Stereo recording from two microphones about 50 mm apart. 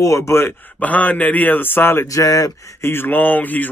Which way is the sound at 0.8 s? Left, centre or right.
Left.